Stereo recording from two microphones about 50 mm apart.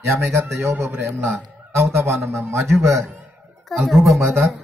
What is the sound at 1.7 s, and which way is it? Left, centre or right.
Speech, right.